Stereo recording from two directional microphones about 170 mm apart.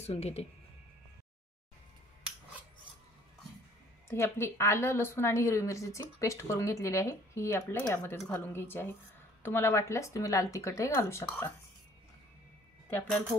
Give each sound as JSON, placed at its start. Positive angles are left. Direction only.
{"t": 0.0, "sound": "speech", "side_deg": 40}
{"t": 4.1, "sound": "a woman's voice", "side_deg": 15}
{"t": 12.9, "sound": "a woman's voice", "side_deg": 10}